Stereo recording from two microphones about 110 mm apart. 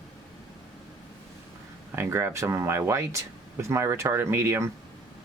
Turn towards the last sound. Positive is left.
turn(degrees=-25)  # may be behind; listen again after turning